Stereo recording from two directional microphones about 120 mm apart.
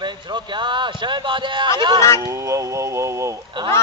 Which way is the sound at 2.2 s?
25° right (ahead or behind).